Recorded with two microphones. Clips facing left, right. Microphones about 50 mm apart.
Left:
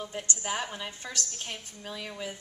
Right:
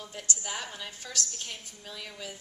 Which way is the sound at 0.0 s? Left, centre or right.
Left.